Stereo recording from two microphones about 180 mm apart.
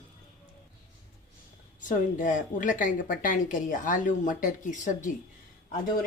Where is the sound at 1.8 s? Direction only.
45° left (ahead or behind).